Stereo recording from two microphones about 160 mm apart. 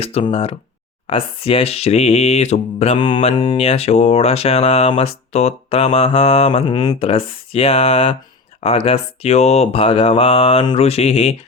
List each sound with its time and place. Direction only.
0.0 s speech: 40° left (ahead or behind)
3.3 s speech: 25° left (ahead or behind)
3.6 s speech: 40° left (ahead or behind)